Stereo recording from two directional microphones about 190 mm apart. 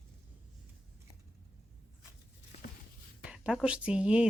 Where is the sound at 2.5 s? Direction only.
35° left (ahead or behind).